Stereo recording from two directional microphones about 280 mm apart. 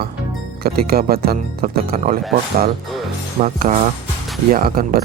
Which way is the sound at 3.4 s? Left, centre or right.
Right.